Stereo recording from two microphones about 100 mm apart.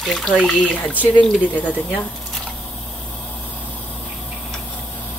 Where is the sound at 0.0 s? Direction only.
5° left (ahead or behind).